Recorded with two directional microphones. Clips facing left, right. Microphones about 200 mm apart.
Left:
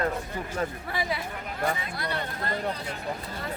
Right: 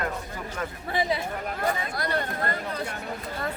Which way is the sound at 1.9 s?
45° right (ahead or behind).